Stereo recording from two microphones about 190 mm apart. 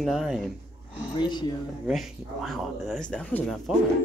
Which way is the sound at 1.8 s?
Centre (ahead or behind).